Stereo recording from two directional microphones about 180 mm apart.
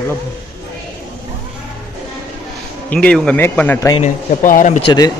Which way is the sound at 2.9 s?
5° left (ahead or behind).